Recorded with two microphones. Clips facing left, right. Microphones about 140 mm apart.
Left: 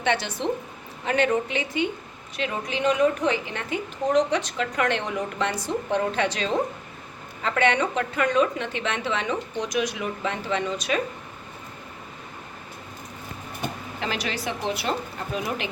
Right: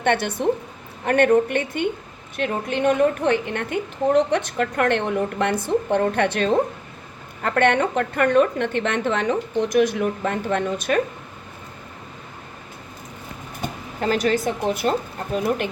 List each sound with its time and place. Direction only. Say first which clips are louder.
0.0 s a woman's voice: right 5 dB; 55° right (ahead or behind)
14.0 s a woman's voice: right 9 dB; 45° right (ahead or behind)